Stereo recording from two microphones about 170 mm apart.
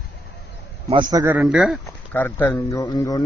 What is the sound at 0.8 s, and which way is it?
Speech, 25° right (ahead or behind).